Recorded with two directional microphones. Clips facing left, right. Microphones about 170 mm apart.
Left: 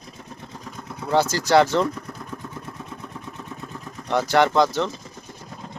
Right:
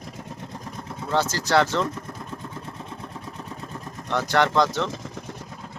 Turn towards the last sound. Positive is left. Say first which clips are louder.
# left 3 dB
turn(degrees=5)  # may be behind; listen again after turning